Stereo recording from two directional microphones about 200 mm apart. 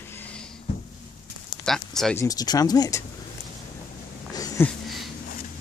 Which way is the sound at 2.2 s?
20° left (ahead or behind).